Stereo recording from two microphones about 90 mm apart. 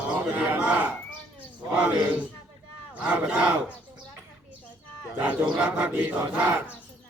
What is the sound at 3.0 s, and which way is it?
Battle cry, 20° right (ahead or behind).